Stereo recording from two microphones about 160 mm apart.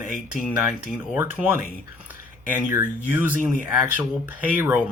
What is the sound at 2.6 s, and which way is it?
Speech, 10° right (ahead or behind).